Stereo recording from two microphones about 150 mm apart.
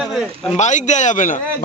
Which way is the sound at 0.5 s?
55° left (ahead or behind).